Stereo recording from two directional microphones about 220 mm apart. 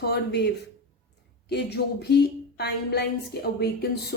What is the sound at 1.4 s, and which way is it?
Speech, 50° left (ahead or behind).